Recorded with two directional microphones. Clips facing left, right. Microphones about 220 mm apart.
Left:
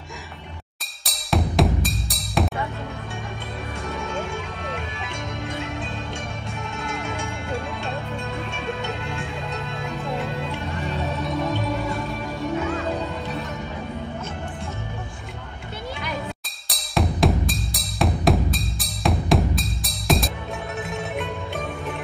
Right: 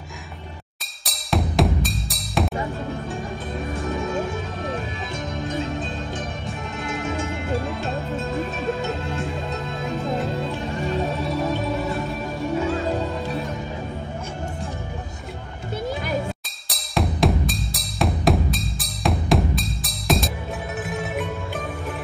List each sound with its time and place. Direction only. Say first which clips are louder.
1.0 s music: even; centre (ahead or behind)
4.0 s music: right 3 dB; 35° right (ahead or behind)
5.4 s music: right 5 dB; 35° right (ahead or behind)
6.8 s music: right 3 dB; centre (ahead or behind)
7.2 s music: right 4 dB; 35° right (ahead or behind)
11.2 s music: right 1 dB; 5° right (ahead or behind)
16.0 s music: right 2 dB; 45° right (ahead or behind)
16.6 s music: even; centre (ahead or behind)